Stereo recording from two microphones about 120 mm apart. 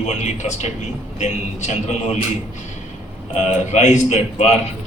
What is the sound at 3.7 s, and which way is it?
Speech, 80° left.